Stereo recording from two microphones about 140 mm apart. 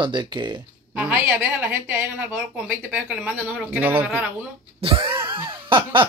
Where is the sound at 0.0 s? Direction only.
35° right (ahead or behind).